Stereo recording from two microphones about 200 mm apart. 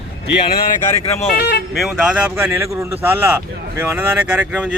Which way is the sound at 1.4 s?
55° left (ahead or behind).